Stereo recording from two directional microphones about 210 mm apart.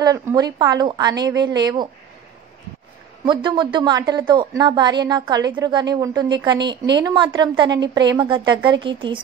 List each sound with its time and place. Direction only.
0.0 s a woman's voice: 15° right (ahead or behind)
3.3 s a woman's voice: 20° right (ahead or behind)